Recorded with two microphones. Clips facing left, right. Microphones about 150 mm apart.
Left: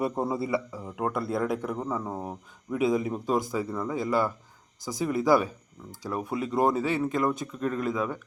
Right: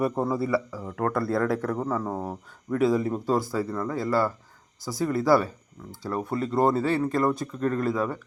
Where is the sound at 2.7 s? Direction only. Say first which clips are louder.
Right 3 dB; 15° left (ahead or behind).